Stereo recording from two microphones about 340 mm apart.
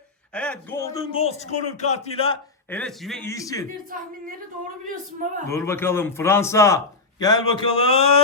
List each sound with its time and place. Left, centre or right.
0.3 s a man's voice: centre
2.6 s a man's voice: centre
3.8 s a woman's voice: right
5.5 s a man's voice: centre